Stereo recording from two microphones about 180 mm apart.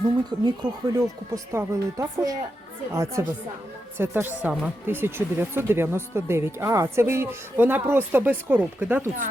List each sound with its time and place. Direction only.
0.3 s speech: 25° right (ahead or behind)